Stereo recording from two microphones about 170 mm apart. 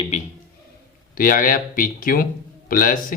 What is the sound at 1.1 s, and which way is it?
Speech, 55° left (ahead or behind).